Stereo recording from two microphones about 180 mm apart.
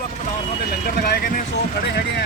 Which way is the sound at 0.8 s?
55° left (ahead or behind).